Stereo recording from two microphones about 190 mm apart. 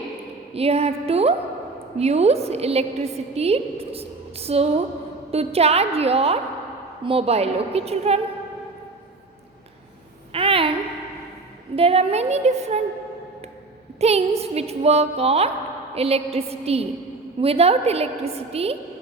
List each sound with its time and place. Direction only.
0.5 s a woman's voice: 30° right (ahead or behind)
10.3 s a sound: 30° right (ahead or behind)
11.8 s a woman's voice: 30° right (ahead or behind)
14.0 s a woman's voice: 35° right (ahead or behind)